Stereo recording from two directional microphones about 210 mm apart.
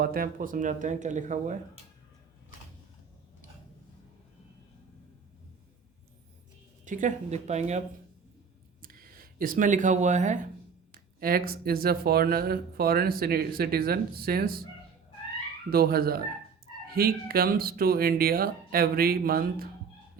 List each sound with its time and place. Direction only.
0.0 s speech: 45° right (ahead or behind)
6.8 s speech: 35° right (ahead or behind)
8.8 s speech: 45° right (ahead or behind)
10.9 s speech: 45° right (ahead or behind)
15.7 s speech: 45° right (ahead or behind)